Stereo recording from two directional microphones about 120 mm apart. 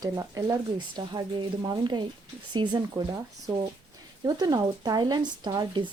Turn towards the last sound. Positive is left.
turn(degrees=-35)  # may be behind; listen again after turning